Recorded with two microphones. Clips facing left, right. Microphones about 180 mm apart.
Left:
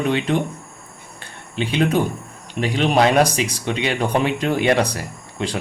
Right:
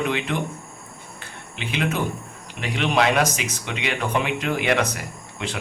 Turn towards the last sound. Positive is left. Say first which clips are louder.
# left 5 dB
turn(degrees=35)  # may be behind; listen again after turning